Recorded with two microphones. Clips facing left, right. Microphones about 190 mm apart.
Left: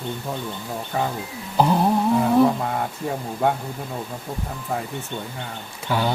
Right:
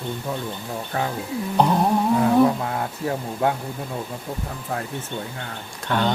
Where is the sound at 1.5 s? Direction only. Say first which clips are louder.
Left 1 dB; centre (ahead or behind).